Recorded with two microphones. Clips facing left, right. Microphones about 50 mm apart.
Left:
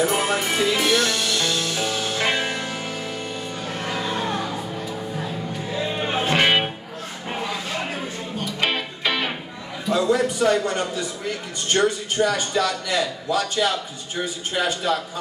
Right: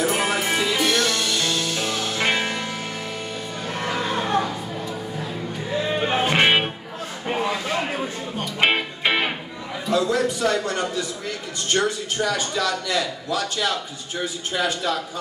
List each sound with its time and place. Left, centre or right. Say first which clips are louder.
0.0 s music: left 1 dB; centre
3.9 s music: right 1 dB; centre
5.9 s music: right 1 dB; right
7.2 s a sound: right 4 dB; right
8.5 s music: right 5 dB; right
9.9 s a man's voice: left 1 dB; centre
13.7 s a man's voice: left 1 dB; centre